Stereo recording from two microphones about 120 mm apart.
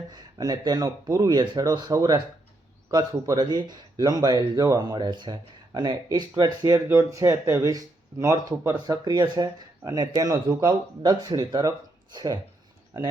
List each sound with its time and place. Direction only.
0.1 s speech: 35° right (ahead or behind)